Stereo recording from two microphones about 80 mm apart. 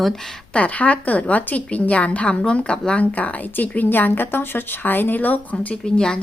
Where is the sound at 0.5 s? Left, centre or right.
Centre.